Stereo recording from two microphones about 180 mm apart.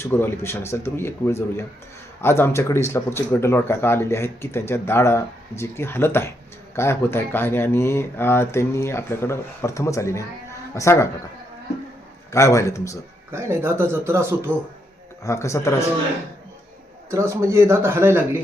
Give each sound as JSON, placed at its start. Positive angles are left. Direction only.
{"t": 0.0, "sound": "speech", "side_deg": 15}
{"t": 12.3, "sound": "speech", "side_deg": 15}
{"t": 13.3, "sound": "speech", "side_deg": -15}
{"t": 15.2, "sound": "speech", "side_deg": 15}
{"t": 17.1, "sound": "speech", "side_deg": -15}